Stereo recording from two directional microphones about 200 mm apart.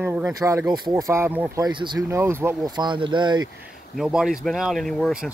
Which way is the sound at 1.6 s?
20° right (ahead or behind).